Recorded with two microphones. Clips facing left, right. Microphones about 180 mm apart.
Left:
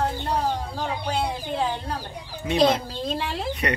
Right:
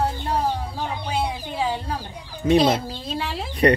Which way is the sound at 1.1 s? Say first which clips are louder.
Right 1 dB; 5° right (ahead or behind).